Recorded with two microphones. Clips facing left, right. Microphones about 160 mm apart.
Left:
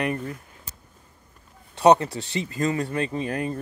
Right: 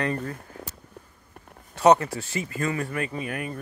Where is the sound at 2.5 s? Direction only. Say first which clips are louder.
Left 4 dB; 30° left (ahead or behind).